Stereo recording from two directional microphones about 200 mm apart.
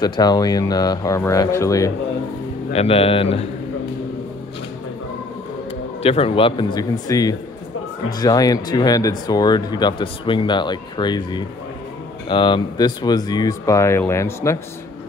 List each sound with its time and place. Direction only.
0.0 s speech: 20° left (ahead or behind)
2.7 s speech: 30° left (ahead or behind)
6.0 s speech: 30° left (ahead or behind); by 14.6 s 15° left (ahead or behind)